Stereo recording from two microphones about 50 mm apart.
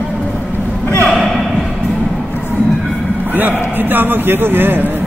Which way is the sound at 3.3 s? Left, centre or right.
Right.